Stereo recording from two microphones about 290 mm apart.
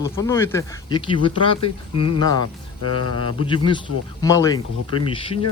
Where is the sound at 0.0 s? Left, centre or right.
Centre.